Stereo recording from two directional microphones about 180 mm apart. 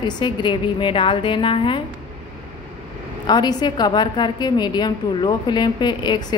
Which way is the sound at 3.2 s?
25° left (ahead or behind).